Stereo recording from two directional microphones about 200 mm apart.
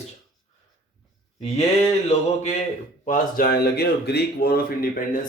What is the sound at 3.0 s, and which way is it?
A man's voice, 45° left (ahead or behind).